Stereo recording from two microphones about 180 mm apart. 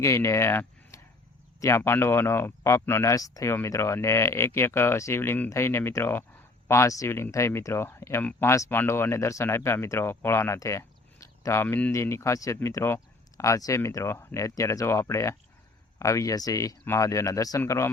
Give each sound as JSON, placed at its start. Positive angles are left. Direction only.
{"t": 0.0, "sound": "speech", "side_deg": 15}